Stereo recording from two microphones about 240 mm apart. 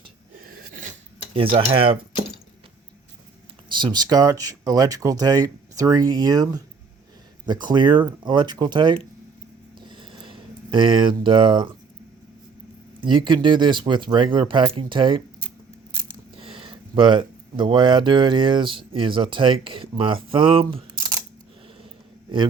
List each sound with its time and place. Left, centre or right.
0.4 s sneeze: right
1.4 s speech: right
3.7 s speech: centre
9.7 s a sound: centre
13.0 s speech: centre